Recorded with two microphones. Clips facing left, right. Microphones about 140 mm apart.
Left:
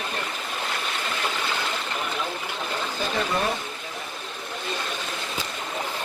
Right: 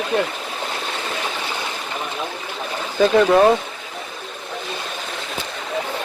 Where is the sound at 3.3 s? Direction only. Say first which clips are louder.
Right 13 dB; 90° right.